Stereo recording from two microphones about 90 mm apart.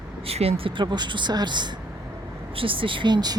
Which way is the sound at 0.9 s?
55° right (ahead or behind).